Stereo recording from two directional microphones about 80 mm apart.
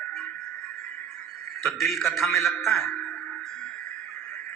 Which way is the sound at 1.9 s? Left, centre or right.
Centre.